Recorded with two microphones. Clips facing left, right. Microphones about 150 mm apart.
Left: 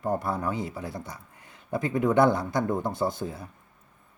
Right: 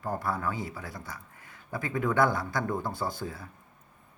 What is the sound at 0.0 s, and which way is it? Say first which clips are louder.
Speech: left 3 dB; 20° left (ahead or behind).